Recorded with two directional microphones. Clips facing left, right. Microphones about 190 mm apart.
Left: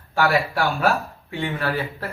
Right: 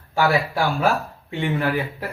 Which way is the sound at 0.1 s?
15° right (ahead or behind).